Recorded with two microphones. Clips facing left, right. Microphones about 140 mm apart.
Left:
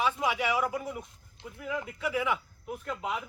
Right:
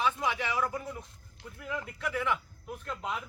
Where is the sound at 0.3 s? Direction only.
10° left (ahead or behind).